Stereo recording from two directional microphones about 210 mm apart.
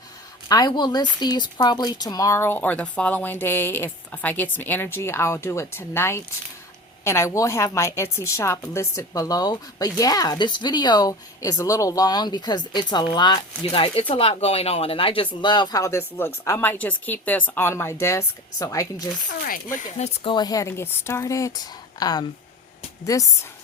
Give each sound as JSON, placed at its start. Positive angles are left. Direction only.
{"t": 0.4, "sound": "a woman's voice", "side_deg": 20}
{"t": 19.5, "sound": "speech", "side_deg": 40}
{"t": 20.3, "sound": "a woman's voice", "side_deg": 20}